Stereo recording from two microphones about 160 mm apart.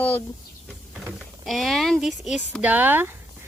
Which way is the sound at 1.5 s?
Centre (ahead or behind).